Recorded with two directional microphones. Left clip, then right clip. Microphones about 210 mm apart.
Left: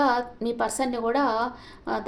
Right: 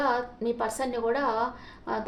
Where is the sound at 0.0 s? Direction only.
40° left (ahead or behind).